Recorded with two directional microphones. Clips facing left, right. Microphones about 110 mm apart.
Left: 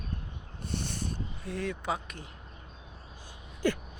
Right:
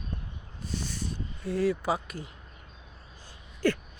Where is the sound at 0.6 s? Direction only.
60° left (ahead or behind).